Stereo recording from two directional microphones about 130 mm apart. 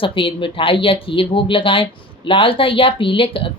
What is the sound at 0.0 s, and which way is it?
Speech, 40° left (ahead or behind).